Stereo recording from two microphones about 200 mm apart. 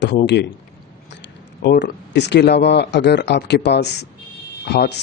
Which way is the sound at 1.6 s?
60° left (ahead or behind).